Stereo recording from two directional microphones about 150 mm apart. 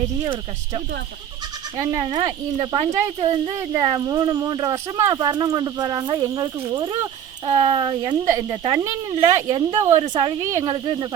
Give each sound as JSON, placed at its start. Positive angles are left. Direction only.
{"t": 1.8, "sound": "speech", "side_deg": -25}
{"t": 10.4, "sound": "speech", "side_deg": -20}